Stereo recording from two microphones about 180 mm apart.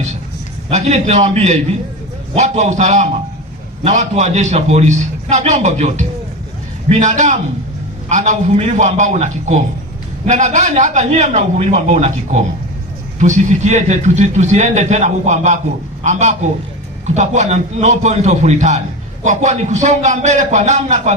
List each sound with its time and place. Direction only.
0.7 s a man's voice: 35° right (ahead or behind)